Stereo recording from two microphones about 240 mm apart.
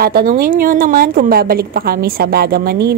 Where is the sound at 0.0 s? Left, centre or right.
Right.